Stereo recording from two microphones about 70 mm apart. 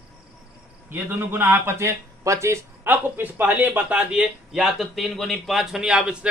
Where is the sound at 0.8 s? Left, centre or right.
Right.